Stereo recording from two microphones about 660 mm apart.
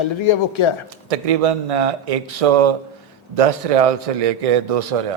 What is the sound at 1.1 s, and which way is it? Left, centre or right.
A man's voice, right.